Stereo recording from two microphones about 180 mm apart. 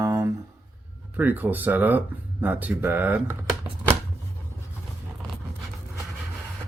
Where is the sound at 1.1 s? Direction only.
10° right (ahead or behind).